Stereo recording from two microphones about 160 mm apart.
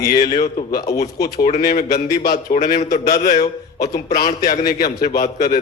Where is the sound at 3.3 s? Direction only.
25° left (ahead or behind).